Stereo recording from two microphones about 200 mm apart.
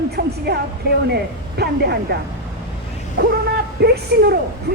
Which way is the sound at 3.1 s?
55° right (ahead or behind).